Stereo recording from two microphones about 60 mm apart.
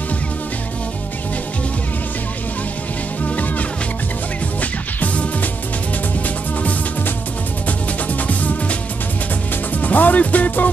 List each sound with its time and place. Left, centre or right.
4.6 s music: left
7.6 s music: left
9.8 s music: left